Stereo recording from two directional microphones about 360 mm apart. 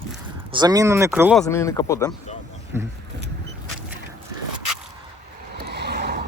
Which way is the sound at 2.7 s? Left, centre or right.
Centre.